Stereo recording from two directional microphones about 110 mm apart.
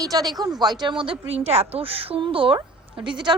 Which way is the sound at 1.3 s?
65° right (ahead or behind).